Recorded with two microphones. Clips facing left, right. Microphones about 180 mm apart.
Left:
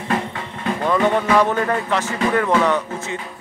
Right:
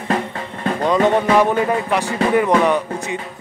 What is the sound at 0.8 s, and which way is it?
Speech, 20° right (ahead or behind).